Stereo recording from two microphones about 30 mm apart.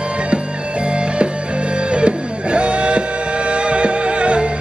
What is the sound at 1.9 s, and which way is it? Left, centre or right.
Music, right.